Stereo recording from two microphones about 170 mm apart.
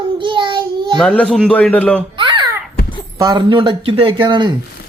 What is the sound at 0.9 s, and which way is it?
A man's voice, 5° left (ahead or behind).